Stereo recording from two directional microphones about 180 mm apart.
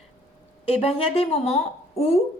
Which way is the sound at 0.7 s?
35° left (ahead or behind).